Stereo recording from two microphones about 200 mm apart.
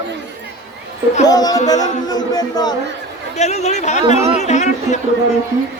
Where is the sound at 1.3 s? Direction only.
20° left (ahead or behind).